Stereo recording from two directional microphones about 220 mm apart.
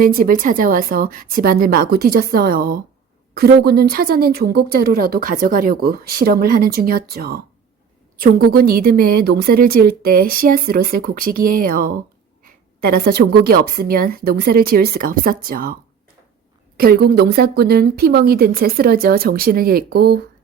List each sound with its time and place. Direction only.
0.0 s a woman's voice: 40° right (ahead or behind)
8.5 s a woman's voice: 45° right (ahead or behind)
16.7 s a woman's voice: 45° right (ahead or behind)